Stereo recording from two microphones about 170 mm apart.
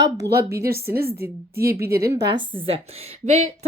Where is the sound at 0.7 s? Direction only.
65° right (ahead or behind).